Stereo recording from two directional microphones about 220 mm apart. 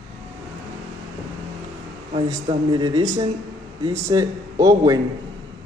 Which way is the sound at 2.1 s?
20° right (ahead or behind).